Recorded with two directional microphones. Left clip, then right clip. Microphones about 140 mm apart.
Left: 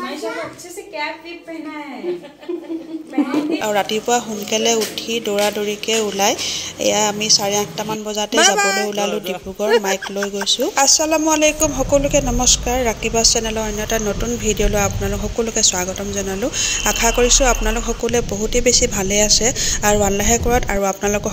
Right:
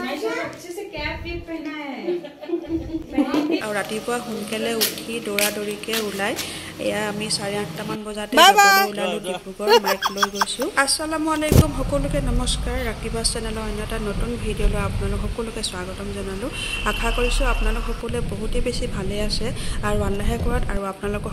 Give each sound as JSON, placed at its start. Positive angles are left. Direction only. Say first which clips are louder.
{"t": 3.6, "sound": "speech", "louder": "left 7 dB", "side_deg": 30}
{"t": 8.4, "sound": "speech", "louder": "right 3 dB", "side_deg": -15}
{"t": 8.9, "sound": "speech", "louder": "left 4 dB", "side_deg": 25}
{"t": 9.7, "sound": "speech", "louder": "even", "side_deg": -30}
{"t": 10.5, "sound": "speech", "louder": "left 6 dB", "side_deg": 25}